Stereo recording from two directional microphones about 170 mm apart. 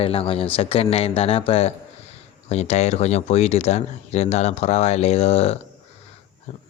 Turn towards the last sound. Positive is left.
turn(degrees=35)  # may be behind; listen again after turning